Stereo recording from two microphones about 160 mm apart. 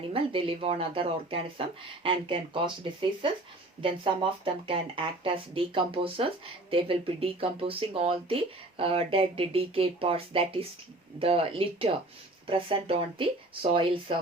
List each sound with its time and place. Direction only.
0.1 s speech: 35° right (ahead or behind)